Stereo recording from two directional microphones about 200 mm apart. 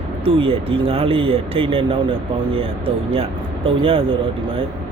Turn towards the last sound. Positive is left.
turn(degrees=-25)  # may be behind; listen again after turning